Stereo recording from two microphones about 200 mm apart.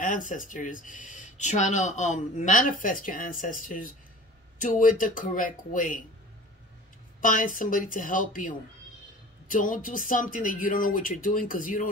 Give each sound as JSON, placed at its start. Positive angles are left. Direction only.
{"t": 0.0, "sound": "speech", "side_deg": 40}
{"t": 7.2, "sound": "speech", "side_deg": 40}